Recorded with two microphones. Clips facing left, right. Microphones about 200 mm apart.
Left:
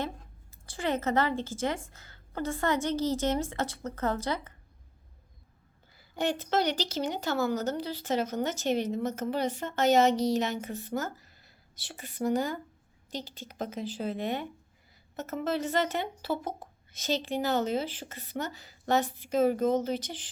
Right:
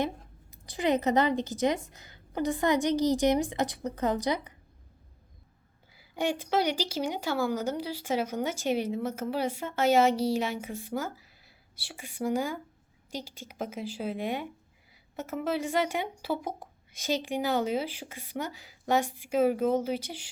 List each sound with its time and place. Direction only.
0.5 s a woman's voice: 15° right (ahead or behind)
5.9 s a woman's voice: 10° right (ahead or behind)